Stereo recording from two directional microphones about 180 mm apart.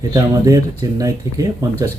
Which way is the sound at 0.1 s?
20° right (ahead or behind).